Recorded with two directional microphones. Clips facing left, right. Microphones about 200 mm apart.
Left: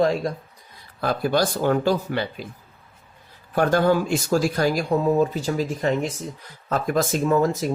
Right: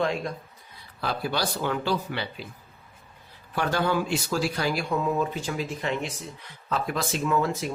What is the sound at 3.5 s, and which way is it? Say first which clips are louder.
Speech: left 7 dB; 45° left (ahead or behind).